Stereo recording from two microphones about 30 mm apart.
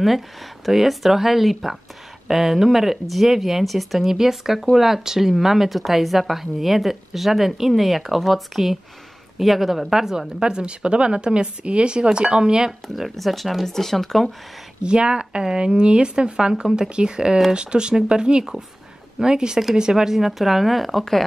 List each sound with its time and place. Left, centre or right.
0.7 s speech: centre
4.1 s speech: centre
5.7 s speech: centre; by 12.7 s right
12.8 s speech: centre
13.7 s speech: centre
14.8 s a woman's voice: right
20.2 s speech: centre